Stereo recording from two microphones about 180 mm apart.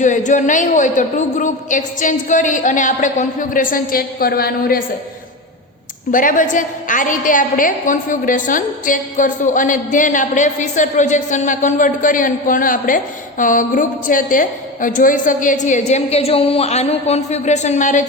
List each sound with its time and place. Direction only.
0.0 s a woman's voice: 45° left (ahead or behind)
6.1 s a woman's voice: 45° left (ahead or behind)